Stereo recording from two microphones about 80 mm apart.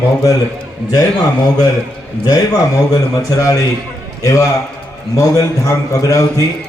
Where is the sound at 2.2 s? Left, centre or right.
Left.